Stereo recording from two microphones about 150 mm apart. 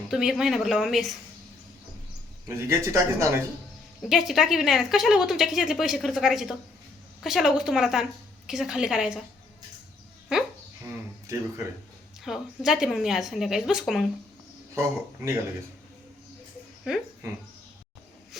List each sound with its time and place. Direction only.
0.1 s a woman's voice: 5° right (ahead or behind)
2.5 s speech: 20° right (ahead or behind)
4.1 s a woman's voice: centre (ahead or behind)
10.8 s a sound: 20° right (ahead or behind)
12.2 s a woman's voice: centre (ahead or behind)
14.8 s speech: 20° right (ahead or behind)
16.9 s a woman's voice: 5° right (ahead or behind)